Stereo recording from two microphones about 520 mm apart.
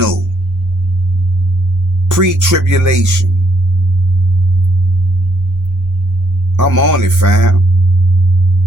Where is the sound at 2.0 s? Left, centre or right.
Right.